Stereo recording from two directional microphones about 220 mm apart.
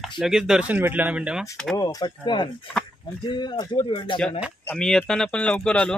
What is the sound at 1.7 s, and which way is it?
Speech, 15° left (ahead or behind).